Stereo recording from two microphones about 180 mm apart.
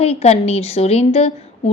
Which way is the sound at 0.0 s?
35° left (ahead or behind).